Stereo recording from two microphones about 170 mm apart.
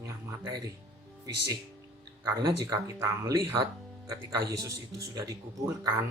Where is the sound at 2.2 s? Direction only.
25° right (ahead or behind).